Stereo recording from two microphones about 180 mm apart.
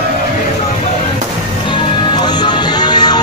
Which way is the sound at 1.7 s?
25° left (ahead or behind).